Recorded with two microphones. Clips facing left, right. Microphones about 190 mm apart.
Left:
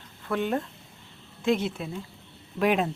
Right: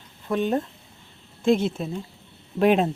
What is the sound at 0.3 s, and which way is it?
A woman's voice, 20° right (ahead or behind).